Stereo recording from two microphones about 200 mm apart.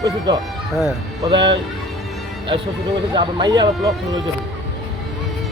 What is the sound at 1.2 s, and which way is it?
Speech, 25° right (ahead or behind).